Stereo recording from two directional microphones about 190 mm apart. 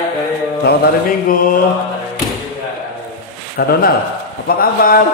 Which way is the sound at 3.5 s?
55° left (ahead or behind).